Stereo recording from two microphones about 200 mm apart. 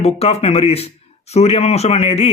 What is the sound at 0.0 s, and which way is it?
Speech, 30° left (ahead or behind).